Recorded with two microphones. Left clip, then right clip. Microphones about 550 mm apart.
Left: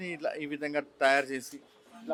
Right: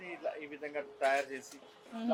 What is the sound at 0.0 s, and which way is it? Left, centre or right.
A man's voice, left.